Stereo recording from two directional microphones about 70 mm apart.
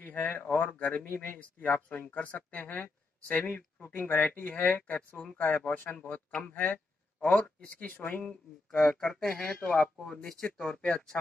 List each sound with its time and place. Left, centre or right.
0.0 s a sound: left
0.4 s speech: left
8.0 s speech: left
8.3 s speech: centre